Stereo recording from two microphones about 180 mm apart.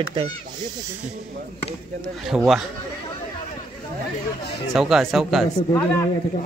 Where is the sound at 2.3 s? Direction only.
10° right (ahead or behind).